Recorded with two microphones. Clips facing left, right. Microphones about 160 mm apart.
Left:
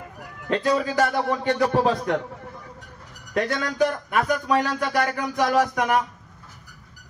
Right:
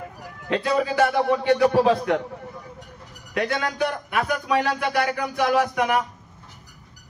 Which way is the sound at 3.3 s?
40° left (ahead or behind).